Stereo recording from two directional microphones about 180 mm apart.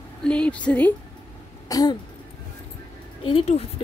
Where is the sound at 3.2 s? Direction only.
30° left (ahead or behind).